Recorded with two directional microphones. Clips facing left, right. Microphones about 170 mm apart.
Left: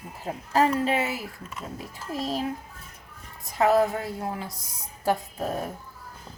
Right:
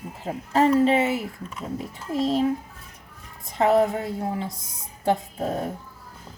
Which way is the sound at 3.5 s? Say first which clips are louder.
Right 2 dB; 25° right (ahead or behind).